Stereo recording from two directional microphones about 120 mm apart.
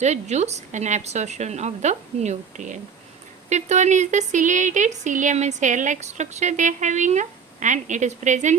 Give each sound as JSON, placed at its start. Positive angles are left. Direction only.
{"t": 0.0, "sound": "a woman's voice", "side_deg": -70}